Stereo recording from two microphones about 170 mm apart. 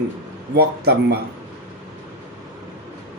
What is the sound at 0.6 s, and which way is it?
Speech, 70° right (ahead or behind).